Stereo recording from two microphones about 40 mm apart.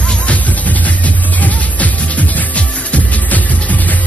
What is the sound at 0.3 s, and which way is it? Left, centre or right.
Music, left.